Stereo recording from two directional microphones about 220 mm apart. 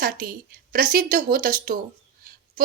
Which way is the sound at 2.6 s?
40° right (ahead or behind).